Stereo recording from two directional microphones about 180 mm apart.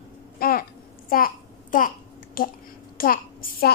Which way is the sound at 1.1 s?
50° left (ahead or behind).